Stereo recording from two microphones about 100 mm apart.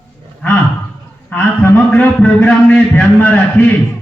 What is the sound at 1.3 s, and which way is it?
A man's voice, 15° left (ahead or behind).